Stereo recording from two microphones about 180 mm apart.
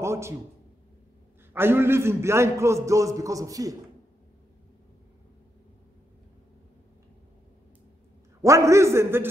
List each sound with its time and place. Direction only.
0.0 s a sound: 15° right (ahead or behind)
1.5 s a man's voice: 10° right (ahead or behind)
8.4 s a man's voice: 15° right (ahead or behind)